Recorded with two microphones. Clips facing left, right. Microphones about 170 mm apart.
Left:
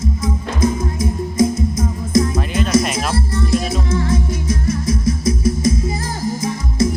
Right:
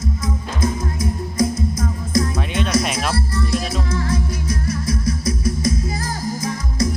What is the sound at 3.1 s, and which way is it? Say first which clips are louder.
Music: left 3 dB; 25° left (ahead or behind).